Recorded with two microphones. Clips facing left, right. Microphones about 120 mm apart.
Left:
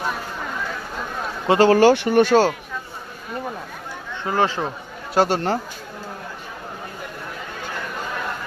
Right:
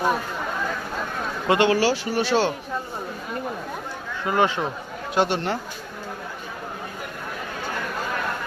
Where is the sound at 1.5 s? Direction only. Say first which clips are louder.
Left 6 dB; 40° left (ahead or behind).